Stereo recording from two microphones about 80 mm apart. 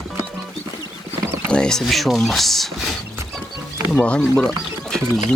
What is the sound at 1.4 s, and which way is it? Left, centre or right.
Speech, centre.